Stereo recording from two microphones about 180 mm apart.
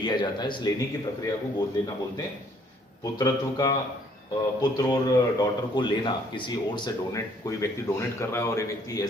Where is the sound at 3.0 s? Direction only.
20° left (ahead or behind).